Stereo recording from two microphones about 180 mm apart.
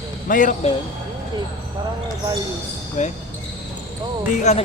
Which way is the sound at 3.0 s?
40° left (ahead or behind).